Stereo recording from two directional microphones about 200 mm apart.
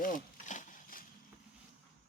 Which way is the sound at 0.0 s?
40° left (ahead or behind).